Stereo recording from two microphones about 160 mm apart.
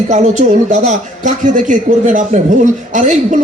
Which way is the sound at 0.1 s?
45° right (ahead or behind).